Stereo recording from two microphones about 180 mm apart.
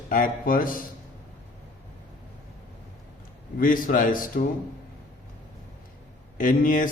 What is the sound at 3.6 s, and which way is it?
Speech, 50° left (ahead or behind).